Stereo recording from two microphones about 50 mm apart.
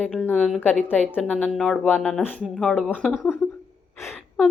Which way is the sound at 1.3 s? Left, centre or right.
Centre.